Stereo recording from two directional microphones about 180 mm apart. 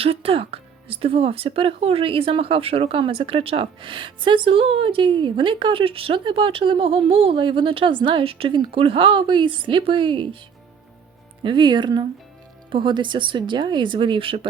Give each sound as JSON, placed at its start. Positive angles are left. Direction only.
{"t": 0.0, "sound": "speech", "side_deg": -30}
{"t": 11.4, "sound": "speech", "side_deg": -25}